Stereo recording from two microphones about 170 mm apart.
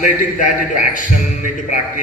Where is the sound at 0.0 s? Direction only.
50° left (ahead or behind).